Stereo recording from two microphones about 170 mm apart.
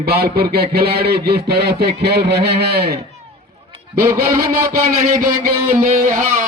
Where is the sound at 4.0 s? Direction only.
60° right (ahead or behind).